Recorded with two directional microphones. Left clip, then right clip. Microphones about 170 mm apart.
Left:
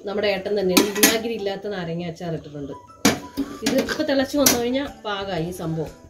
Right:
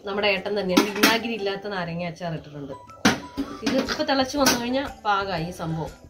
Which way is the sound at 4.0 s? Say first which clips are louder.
Even; 25° right (ahead or behind).